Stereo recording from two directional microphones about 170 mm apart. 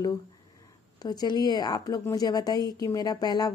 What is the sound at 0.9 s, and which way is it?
A woman's voice, 25° left (ahead or behind).